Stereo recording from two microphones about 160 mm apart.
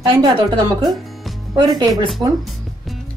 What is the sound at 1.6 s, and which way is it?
Speech, 30° right (ahead or behind).